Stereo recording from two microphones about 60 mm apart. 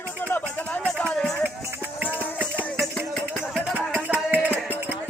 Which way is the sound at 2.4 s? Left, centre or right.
Right.